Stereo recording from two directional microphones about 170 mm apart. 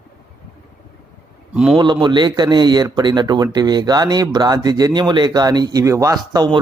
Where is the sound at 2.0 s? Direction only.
25° right (ahead or behind).